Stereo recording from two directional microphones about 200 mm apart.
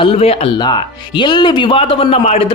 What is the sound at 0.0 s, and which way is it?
Speech, 30° left (ahead or behind).